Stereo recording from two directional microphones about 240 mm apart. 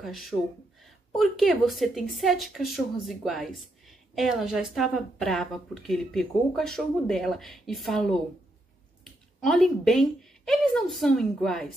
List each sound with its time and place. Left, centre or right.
0.0 s a woman's voice: centre